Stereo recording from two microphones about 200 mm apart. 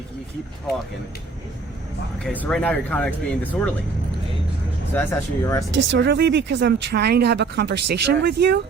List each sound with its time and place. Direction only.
2.2 s speech: 5° left (ahead or behind)
4.9 s speech: 15° left (ahead or behind)
5.7 s speech: 60° right (ahead or behind)